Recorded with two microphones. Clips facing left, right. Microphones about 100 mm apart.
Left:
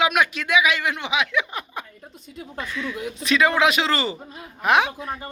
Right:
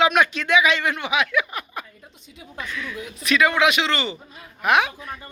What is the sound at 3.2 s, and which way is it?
Speech, 30° left (ahead or behind).